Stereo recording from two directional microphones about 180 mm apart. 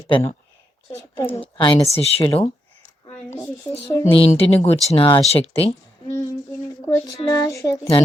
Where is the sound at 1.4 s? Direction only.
30° left (ahead or behind).